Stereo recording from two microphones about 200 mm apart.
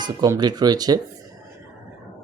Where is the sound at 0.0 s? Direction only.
20° right (ahead or behind).